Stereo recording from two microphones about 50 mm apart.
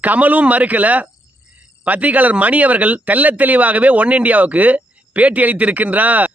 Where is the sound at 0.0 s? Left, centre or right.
Right.